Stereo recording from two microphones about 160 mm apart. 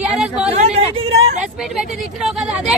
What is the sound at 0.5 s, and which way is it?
Speech, 40° right (ahead or behind).